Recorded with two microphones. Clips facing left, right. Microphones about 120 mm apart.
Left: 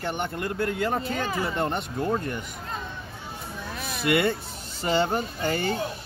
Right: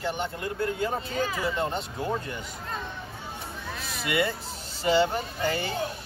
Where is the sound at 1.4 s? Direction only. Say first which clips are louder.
Left 1 dB; 55° left (ahead or behind).